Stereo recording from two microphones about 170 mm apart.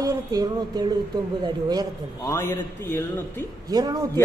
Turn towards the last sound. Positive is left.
turn(degrees=-25)  # may be behind; listen again after turning